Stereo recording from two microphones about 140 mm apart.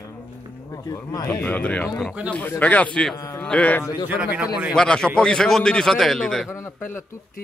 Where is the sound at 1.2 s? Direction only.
10° left (ahead or behind).